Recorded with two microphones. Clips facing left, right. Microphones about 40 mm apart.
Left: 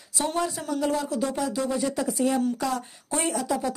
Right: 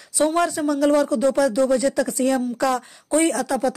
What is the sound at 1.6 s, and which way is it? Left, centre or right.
Speech, right.